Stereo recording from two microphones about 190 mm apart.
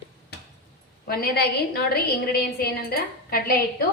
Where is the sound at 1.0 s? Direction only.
55° left (ahead or behind).